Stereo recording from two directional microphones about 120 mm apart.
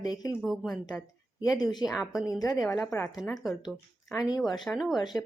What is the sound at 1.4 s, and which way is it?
Speech, 35° left (ahead or behind).